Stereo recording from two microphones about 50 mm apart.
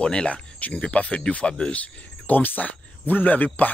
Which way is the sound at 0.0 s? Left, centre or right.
Centre.